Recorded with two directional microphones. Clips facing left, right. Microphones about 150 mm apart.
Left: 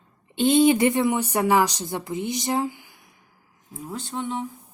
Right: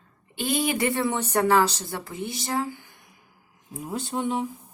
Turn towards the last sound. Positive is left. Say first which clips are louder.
# right 2 dB
turn(degrees=-10)  # may be behind; listen again after turning